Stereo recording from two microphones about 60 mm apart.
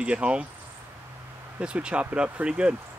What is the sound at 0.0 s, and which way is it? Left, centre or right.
Speech, centre.